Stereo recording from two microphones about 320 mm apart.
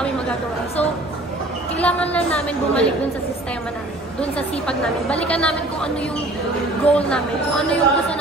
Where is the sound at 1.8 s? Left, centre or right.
Centre.